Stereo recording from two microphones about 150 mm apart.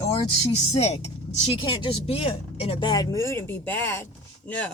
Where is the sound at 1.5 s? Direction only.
35° left (ahead or behind).